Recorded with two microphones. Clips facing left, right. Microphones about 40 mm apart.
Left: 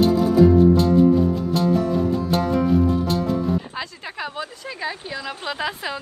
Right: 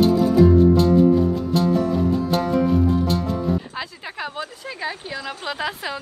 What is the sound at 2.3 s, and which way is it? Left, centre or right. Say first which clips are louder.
Music: left 2 dB; centre.